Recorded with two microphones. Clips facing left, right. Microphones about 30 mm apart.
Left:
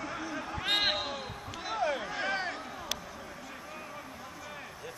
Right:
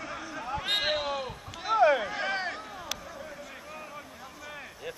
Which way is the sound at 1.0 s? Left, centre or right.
Centre.